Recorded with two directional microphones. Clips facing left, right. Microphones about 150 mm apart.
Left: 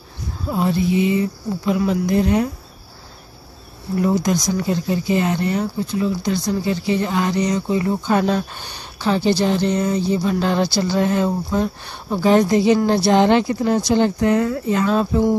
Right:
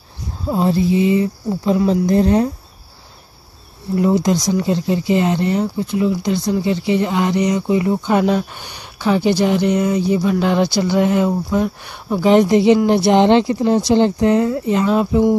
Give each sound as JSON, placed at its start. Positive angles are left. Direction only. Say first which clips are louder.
{"t": 0.5, "sound": "speech", "louder": "right 3 dB", "side_deg": -30}
{"t": 3.9, "sound": "speech", "louder": "right 3 dB", "side_deg": -25}